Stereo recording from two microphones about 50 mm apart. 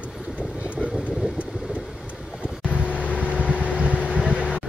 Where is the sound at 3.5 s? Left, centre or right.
Right.